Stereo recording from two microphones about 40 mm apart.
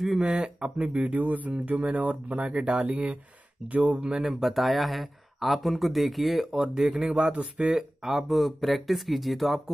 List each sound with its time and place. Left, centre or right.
0.2 s speech: right
1.1 s speech: right
3.6 s speech: right
4.2 s speech: centre
6.5 s speech: centre
7.3 s speech: right
8.0 s speech: centre
8.3 s speech: centre